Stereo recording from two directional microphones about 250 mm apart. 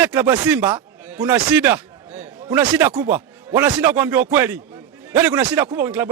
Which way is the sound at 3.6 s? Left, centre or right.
Centre.